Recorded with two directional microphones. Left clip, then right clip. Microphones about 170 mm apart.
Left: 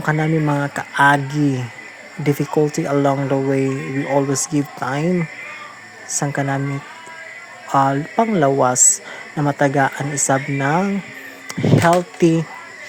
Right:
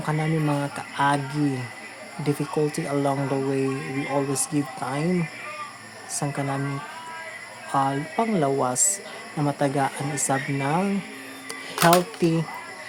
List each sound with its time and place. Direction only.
0.0 s speech: 35° left (ahead or behind)
6.1 s speech: 35° left (ahead or behind)
7.7 s speech: 35° left (ahead or behind)